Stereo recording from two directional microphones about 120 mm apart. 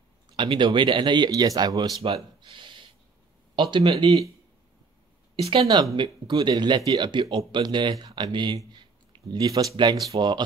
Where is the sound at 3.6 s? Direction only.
45° right (ahead or behind).